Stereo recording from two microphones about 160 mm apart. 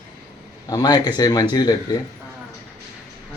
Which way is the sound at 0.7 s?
25° left (ahead or behind).